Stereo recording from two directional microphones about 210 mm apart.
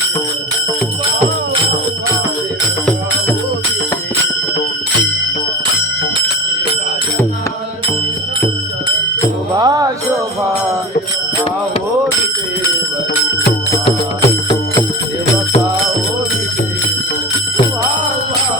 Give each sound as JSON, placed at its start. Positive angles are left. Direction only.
{"t": 9.6, "sound": "music", "side_deg": -20}